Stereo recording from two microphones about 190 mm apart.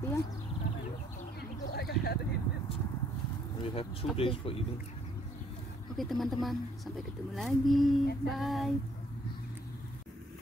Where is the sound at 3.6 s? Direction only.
25° left (ahead or behind).